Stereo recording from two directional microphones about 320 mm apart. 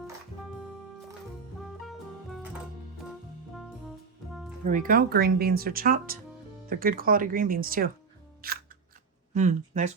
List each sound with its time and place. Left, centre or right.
1.8 s music: centre
4.7 s speech: right